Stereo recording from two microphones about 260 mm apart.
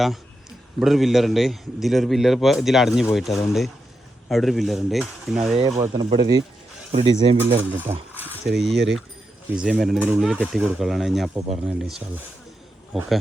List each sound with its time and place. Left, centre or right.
0.8 s a man's voice: centre
5.5 s speech: right
7.3 s a man's voice: centre